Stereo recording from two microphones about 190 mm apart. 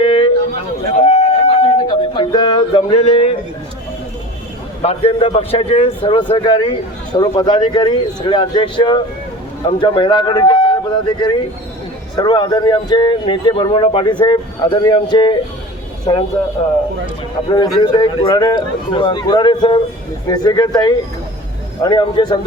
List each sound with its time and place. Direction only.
0.0 s a sound: 30° left (ahead or behind)
1.0 s music: 35° left (ahead or behind)
4.8 s a man's voice: 30° left (ahead or behind)
17.7 s a man's voice: 25° left (ahead or behind)
21.8 s a man's voice: 20° left (ahead or behind)